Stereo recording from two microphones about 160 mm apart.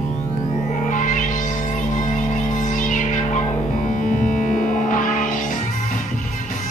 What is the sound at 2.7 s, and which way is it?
Music, 55° left (ahead or behind).